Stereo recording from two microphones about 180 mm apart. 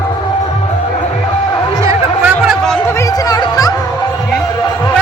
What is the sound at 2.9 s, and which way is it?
Music, 15° left (ahead or behind).